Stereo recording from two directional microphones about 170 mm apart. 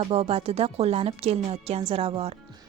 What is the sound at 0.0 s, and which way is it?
A woman's voice, 35° right (ahead or behind).